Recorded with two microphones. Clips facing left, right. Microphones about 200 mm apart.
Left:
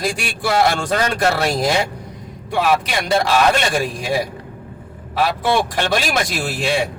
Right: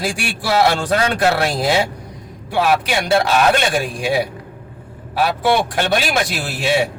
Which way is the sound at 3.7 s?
Centre (ahead or behind).